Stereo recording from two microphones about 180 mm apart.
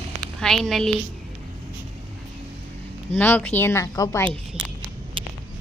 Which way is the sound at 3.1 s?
10° left (ahead or behind).